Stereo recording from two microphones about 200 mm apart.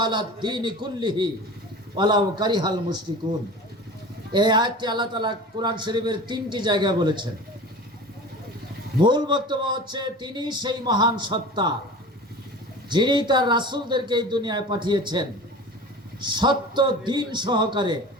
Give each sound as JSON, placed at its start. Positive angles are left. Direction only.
{"t": 0.0, "sound": "a man's voice", "side_deg": -20}
{"t": 4.3, "sound": "a man's voice", "side_deg": -20}
{"t": 9.0, "sound": "a man's voice", "side_deg": -20}
{"t": 12.9, "sound": "a man's voice", "side_deg": -20}